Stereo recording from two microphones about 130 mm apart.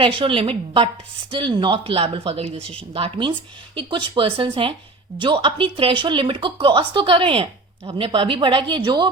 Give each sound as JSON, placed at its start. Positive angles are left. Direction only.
{"t": 0.0, "sound": "speech", "side_deg": -40}